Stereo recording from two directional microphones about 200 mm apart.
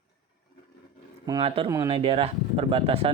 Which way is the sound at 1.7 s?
15° right (ahead or behind).